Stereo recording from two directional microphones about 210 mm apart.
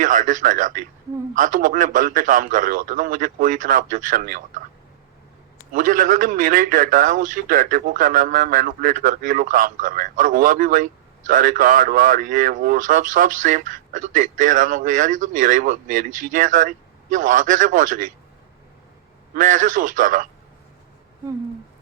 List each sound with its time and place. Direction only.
0.0 s a man's voice: 40° right (ahead or behind)
5.7 s a man's voice: 40° right (ahead or behind)
19.3 s a man's voice: 40° right (ahead or behind)